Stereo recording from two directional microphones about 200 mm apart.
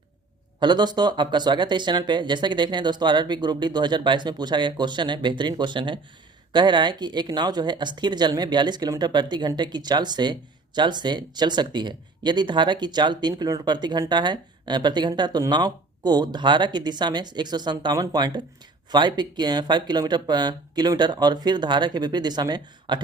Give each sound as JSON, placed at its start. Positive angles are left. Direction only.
{"t": 0.6, "sound": "speech", "side_deg": -20}